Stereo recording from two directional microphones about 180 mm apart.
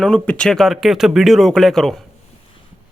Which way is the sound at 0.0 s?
5° left (ahead or behind).